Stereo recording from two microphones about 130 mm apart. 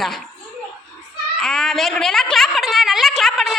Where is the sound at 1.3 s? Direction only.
5° left (ahead or behind).